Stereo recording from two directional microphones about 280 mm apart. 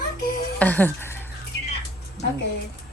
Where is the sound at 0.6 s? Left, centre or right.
Centre.